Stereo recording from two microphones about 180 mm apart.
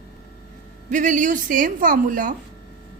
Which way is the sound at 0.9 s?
45° right (ahead or behind).